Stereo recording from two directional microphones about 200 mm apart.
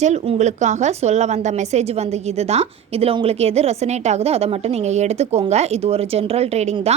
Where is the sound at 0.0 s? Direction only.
35° right (ahead or behind).